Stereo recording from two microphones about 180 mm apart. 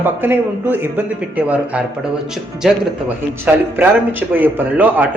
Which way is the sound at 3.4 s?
10° right (ahead or behind).